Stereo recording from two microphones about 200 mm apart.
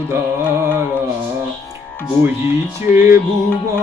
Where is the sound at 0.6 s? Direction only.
10° right (ahead or behind).